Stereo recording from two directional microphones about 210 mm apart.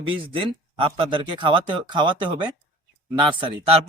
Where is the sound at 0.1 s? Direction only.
25° right (ahead or behind).